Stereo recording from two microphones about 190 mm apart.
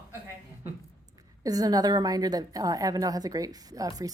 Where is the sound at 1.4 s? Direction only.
20° right (ahead or behind).